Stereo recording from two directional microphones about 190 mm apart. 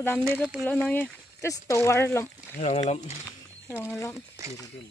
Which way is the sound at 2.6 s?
35° left (ahead or behind).